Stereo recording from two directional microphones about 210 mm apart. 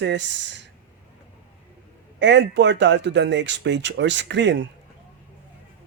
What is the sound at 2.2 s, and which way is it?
Speech, 55° right (ahead or behind).